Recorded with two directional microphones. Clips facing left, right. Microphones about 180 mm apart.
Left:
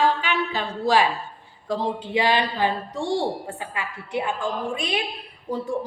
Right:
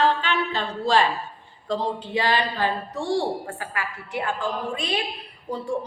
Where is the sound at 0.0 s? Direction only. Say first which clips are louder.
Even; 10° left (ahead or behind).